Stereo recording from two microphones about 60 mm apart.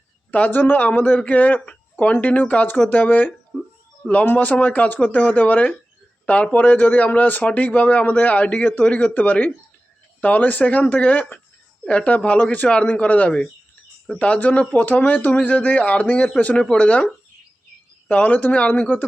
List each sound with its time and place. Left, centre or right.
0.3 s a man's voice: left
18.1 s a man's voice: left